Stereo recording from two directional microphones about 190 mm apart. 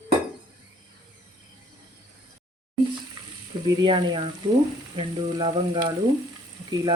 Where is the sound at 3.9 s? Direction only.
25° right (ahead or behind).